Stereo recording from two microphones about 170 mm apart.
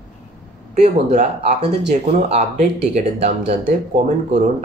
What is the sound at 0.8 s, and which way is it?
Speech, 40° right (ahead or behind).